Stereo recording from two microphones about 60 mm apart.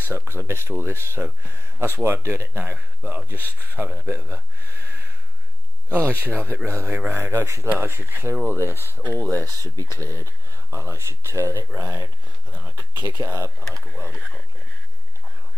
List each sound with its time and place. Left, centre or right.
0.1 s speech: right
5.9 s speech: right
6.6 s speech: right
7.1 s speech: right
9.5 s speech: right
9.9 s speech: right
12.6 s speech: right